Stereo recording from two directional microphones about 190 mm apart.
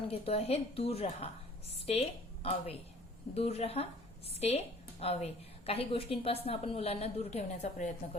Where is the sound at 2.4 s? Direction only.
30° left (ahead or behind).